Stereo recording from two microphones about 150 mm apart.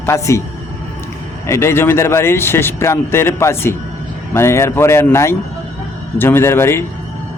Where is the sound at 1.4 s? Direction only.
20° left (ahead or behind).